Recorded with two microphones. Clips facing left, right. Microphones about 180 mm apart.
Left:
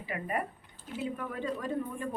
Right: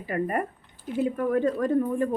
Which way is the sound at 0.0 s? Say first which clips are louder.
Right 7 dB; 45° right (ahead or behind).